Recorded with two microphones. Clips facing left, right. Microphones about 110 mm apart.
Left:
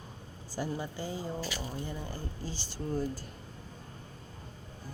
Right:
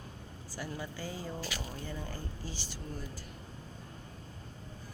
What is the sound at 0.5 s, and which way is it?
Speech, 25° left (ahead or behind).